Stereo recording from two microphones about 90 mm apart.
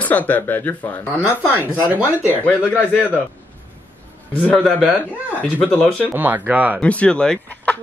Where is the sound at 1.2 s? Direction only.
20° right (ahead or behind).